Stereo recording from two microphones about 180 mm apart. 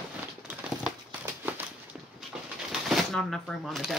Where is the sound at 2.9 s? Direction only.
Centre (ahead or behind).